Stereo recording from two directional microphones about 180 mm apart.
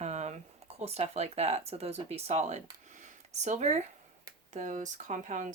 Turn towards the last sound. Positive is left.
turn(degrees=-45)  # may be behind; listen again after turning